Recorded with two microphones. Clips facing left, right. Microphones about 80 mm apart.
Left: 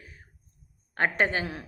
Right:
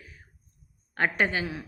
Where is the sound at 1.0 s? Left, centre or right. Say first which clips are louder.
Even; left.